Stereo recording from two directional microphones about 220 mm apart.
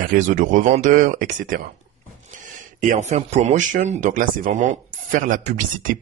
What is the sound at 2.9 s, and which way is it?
Speech, 30° right (ahead or behind).